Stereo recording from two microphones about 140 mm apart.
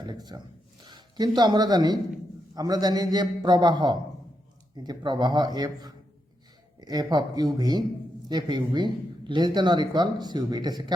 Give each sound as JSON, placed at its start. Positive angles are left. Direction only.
{"t": 0.0, "sound": "a man's voice", "side_deg": -30}